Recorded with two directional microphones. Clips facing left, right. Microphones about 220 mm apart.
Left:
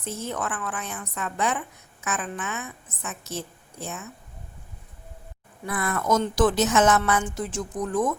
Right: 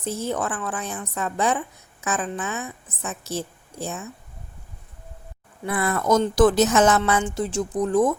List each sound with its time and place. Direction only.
0.0 s a woman's voice: 35° right (ahead or behind)
5.6 s a woman's voice: 30° right (ahead or behind)